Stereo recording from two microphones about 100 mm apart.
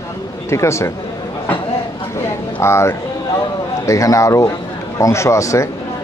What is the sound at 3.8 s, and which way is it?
Speech, 30° left (ahead or behind).